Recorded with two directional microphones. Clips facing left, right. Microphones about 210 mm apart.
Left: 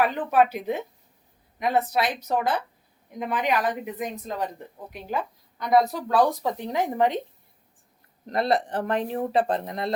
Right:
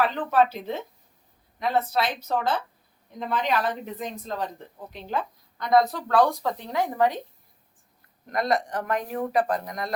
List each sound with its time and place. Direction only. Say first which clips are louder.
0.0 s speech: left 1 dB; 10° left (ahead or behind)
8.3 s speech: left 2 dB; 30° left (ahead or behind)